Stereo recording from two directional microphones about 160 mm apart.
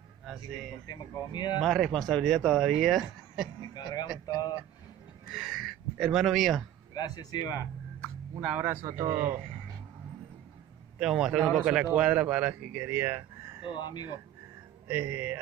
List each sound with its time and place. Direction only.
0.8 s speech: 25° left (ahead or behind)
1.6 s speech: centre (ahead or behind)
3.7 s speech: 25° left (ahead or behind)
5.3 s speech: centre (ahead or behind)
6.9 s speech: 25° left (ahead or behind)
8.4 s speech: 10° right (ahead or behind)
11.0 s speech: 5° right (ahead or behind)
13.7 s speech: 30° left (ahead or behind)
14.9 s speech: 10° right (ahead or behind)